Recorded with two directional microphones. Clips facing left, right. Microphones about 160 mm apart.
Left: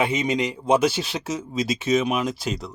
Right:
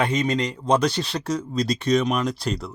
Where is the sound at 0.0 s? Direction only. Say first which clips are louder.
Even; 10° left (ahead or behind).